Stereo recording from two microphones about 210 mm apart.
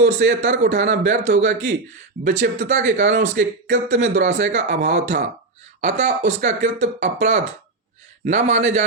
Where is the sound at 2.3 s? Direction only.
65° right (ahead or behind).